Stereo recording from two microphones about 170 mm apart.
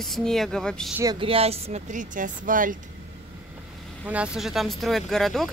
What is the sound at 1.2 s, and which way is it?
Speech, 35° right (ahead or behind).